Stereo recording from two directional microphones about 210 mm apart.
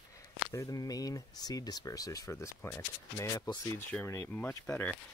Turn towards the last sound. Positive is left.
turn(degrees=10)  # may be behind; listen again after turning